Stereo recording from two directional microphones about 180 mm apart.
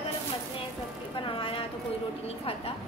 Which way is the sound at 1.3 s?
30° left (ahead or behind).